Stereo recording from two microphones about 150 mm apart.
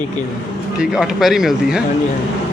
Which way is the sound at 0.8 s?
5° right (ahead or behind).